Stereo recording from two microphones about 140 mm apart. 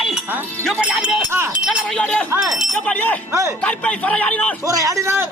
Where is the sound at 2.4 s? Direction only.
5° right (ahead or behind).